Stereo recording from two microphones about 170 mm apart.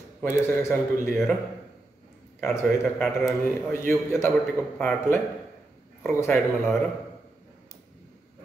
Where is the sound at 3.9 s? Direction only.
15° left (ahead or behind).